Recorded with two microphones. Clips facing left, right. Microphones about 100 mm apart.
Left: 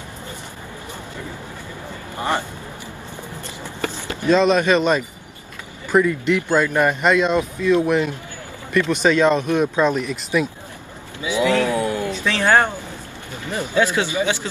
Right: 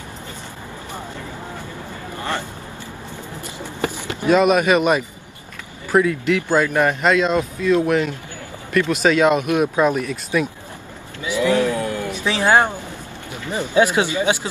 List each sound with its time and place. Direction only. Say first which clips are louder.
3.6 s a sound: right 2 dB; 15° right (ahead or behind)
5.9 s speech: even; 5° right (ahead or behind)
10.3 s speech: even; centre (ahead or behind)
11.4 s speech: right 1 dB; 15° right (ahead or behind)
11.7 s a sound: left 2 dB; 15° left (ahead or behind)
12.1 s speech: right 2 dB; 15° right (ahead or behind)